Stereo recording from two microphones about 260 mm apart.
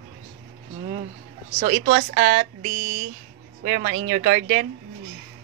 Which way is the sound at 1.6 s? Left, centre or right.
Right.